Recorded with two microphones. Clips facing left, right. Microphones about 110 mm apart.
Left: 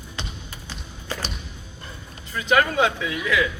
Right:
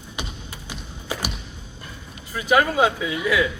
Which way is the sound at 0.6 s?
10° right (ahead or behind).